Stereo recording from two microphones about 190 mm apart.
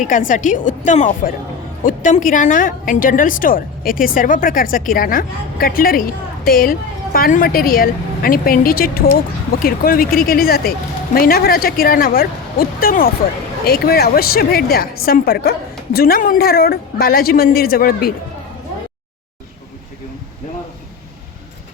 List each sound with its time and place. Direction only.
0.0 s a woman's voice: 45° left (ahead or behind)